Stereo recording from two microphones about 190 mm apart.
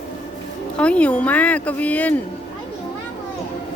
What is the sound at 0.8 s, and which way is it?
Speech, 5° left (ahead or behind).